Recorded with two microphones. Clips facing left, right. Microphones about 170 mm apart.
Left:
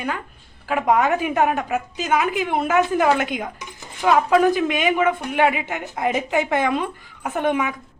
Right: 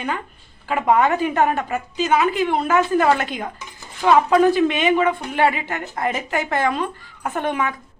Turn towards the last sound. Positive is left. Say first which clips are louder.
# left 2 dB
turn(degrees=15)  # may be behind; listen again after turning